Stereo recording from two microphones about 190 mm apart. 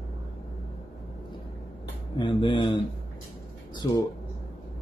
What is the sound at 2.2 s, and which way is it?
Speech, 25° left (ahead or behind).